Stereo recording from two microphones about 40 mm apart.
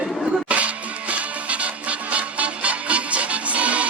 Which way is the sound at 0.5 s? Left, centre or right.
Right.